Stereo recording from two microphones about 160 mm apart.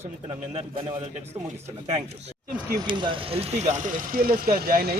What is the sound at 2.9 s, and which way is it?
Speech, 30° right (ahead or behind).